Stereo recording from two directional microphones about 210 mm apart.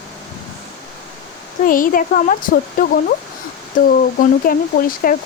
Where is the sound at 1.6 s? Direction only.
40° left (ahead or behind).